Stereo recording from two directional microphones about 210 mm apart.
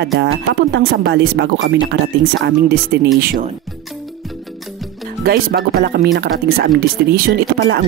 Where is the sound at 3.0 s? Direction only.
45° right (ahead or behind).